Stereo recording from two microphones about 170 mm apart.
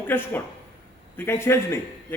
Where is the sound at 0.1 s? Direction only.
15° left (ahead or behind).